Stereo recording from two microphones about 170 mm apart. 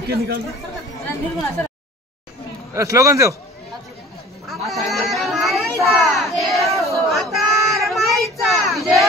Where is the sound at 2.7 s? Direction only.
20° right (ahead or behind).